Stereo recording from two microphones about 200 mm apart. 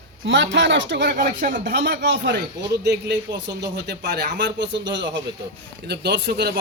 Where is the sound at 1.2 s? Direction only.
40° right (ahead or behind).